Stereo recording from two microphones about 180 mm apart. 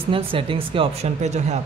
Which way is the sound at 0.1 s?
30° right (ahead or behind).